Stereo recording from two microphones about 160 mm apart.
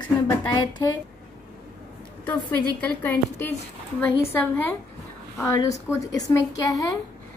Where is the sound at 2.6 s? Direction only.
10° left (ahead or behind).